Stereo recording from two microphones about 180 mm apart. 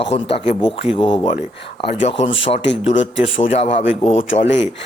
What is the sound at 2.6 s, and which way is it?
Speech, 90° left.